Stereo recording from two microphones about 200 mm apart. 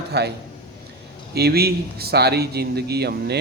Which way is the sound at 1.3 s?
50° right (ahead or behind).